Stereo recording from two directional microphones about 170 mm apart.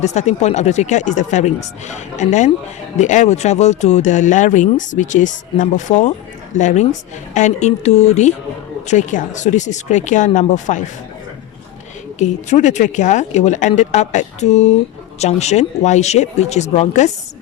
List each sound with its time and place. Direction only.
0.0 s speech: 40° left (ahead or behind)
12.2 s speech: 45° left (ahead or behind)